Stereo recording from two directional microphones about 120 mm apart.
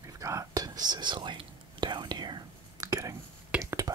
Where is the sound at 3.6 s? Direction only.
25° right (ahead or behind).